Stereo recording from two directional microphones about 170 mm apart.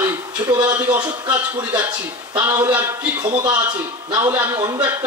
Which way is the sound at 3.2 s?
25° right (ahead or behind).